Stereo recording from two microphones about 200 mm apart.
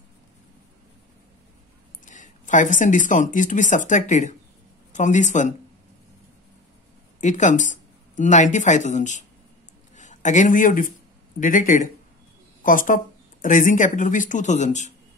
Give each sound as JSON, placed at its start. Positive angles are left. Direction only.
{"t": 2.0, "sound": "speech", "side_deg": 40}
{"t": 7.2, "sound": "speech", "side_deg": 35}